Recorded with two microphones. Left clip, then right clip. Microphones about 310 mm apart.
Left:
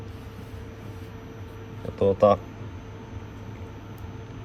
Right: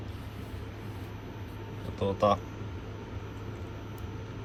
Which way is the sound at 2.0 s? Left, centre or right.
Centre.